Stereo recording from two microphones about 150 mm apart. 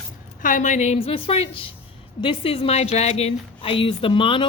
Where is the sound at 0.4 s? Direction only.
60° left (ahead or behind).